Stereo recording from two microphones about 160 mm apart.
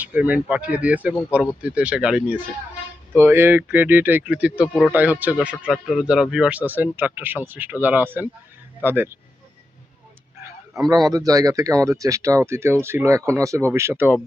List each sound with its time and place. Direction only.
0.0 s speech: 10° right (ahead or behind)
10.8 s speech: 25° right (ahead or behind)